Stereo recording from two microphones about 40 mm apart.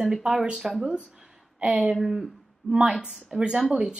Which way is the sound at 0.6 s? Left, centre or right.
Centre.